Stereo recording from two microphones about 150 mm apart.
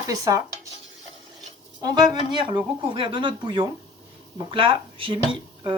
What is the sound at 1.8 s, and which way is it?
Speech, 25° right (ahead or behind).